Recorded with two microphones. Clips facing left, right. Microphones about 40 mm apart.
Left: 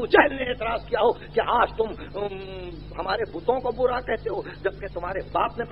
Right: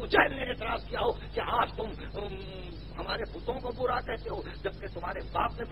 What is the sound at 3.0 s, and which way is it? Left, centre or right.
Speech, centre.